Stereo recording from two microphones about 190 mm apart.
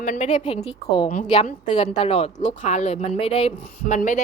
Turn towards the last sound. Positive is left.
turn(degrees=40)  # may be behind; listen again after turning